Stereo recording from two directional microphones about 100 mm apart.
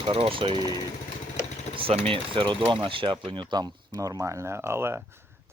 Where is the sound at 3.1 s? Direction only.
40° right (ahead or behind).